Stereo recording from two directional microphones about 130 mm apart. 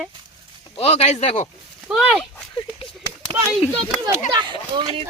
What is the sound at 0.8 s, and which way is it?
Speech, 50° left (ahead or behind).